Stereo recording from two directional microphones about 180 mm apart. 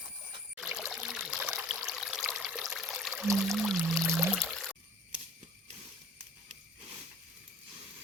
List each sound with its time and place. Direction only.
0.5 s stream: 5° right (ahead or behind)
2.7 s pour: centre (ahead or behind)